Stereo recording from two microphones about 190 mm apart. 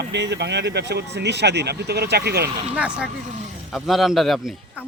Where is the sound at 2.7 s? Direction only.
5° right (ahead or behind).